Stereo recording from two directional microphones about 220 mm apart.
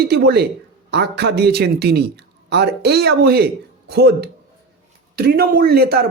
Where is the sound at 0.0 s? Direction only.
45° right (ahead or behind).